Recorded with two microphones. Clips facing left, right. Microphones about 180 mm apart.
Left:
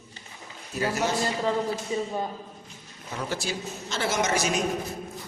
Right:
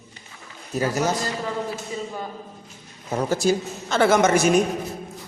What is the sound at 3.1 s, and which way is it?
A woman's voice, 45° right (ahead or behind).